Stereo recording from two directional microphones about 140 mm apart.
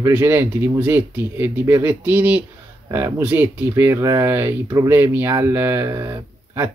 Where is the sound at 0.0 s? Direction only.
20° right (ahead or behind).